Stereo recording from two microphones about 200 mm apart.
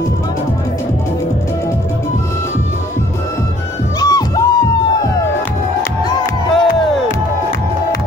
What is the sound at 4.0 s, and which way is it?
Music, 20° left (ahead or behind).